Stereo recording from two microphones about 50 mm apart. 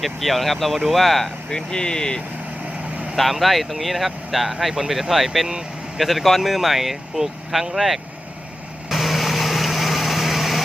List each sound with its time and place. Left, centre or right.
0.0 s speech: centre
1.5 s speech: centre
3.2 s speech: centre
8.9 s vehicle: centre